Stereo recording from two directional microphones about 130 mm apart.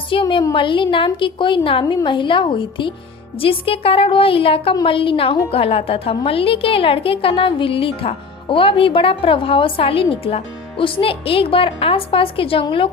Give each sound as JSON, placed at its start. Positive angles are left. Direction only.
{"t": 0.1, "sound": "a woman's voice", "side_deg": 40}